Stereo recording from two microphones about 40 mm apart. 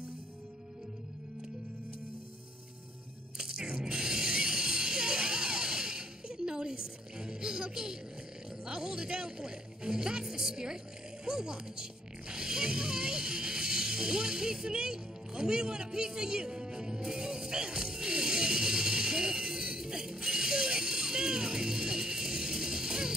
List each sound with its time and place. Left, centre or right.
3.3 s music: centre
8.6 s speech: centre
11.2 s zipper: centre